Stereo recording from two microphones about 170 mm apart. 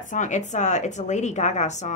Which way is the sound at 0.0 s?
50° left (ahead or behind).